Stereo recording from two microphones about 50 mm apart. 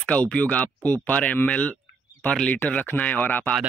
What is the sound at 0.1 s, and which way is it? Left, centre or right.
Speech, left.